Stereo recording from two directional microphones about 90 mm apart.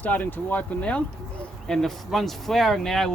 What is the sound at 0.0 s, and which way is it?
Speech, 20° left (ahead or behind).